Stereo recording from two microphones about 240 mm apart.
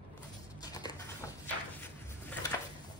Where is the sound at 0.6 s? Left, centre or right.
Centre.